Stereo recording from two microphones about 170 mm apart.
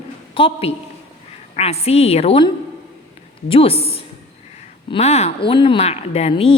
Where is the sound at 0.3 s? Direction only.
30° left (ahead or behind).